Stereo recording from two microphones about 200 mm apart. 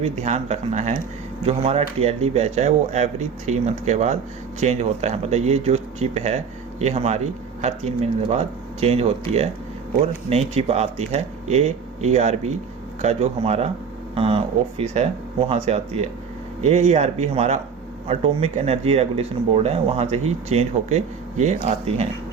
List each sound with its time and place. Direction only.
0.0 s speech: 35° right (ahead or behind)